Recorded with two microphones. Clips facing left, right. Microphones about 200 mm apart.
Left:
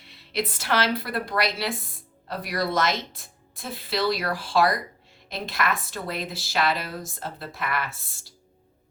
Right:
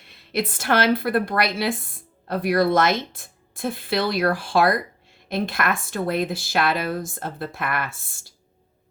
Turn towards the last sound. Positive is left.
turn(degrees=-50)  # may be behind; listen again after turning